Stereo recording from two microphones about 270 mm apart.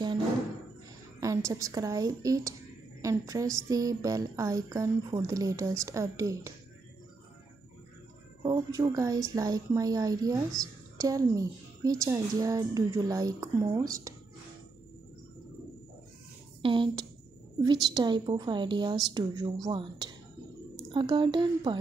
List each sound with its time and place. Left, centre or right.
1.2 s speech: centre
8.4 s speech: centre
16.6 s speech: centre